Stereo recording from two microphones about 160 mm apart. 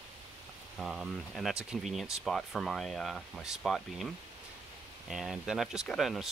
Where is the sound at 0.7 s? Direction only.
5° right (ahead or behind).